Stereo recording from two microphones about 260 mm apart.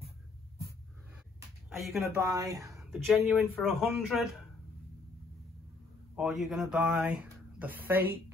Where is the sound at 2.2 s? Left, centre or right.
Centre.